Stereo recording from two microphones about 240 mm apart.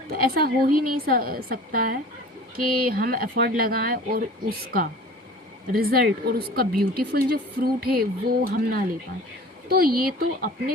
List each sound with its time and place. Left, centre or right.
0.1 s a woman's voice: right
2.6 s speech: right
2.9 s a woman's voice: right